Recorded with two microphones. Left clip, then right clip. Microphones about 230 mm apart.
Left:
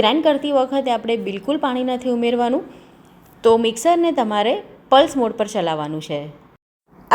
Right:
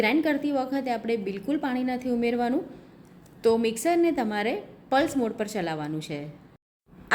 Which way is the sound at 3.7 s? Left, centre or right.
Centre.